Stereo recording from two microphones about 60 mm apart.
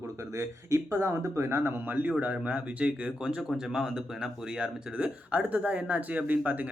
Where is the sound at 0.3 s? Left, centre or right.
Right.